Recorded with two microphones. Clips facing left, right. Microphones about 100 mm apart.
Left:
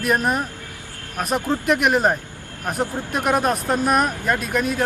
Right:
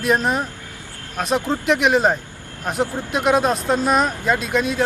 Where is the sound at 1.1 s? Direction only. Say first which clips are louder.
Right 1 dB; 5° left (ahead or behind).